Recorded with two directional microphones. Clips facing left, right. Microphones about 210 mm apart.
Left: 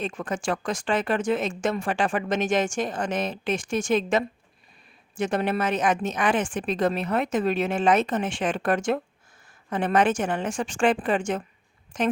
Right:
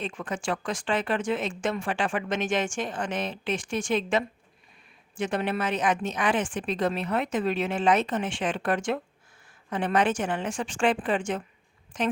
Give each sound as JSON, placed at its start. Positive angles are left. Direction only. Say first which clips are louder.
{"t": 0.0, "sound": "speech", "louder": "left 3 dB", "side_deg": 45}